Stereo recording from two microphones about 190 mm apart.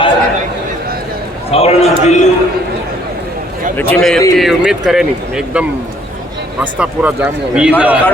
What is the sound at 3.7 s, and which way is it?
Speech, 5° left (ahead or behind).